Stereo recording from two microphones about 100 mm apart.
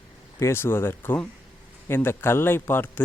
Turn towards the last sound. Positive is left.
turn(degrees=20)  # may be behind; listen again after turning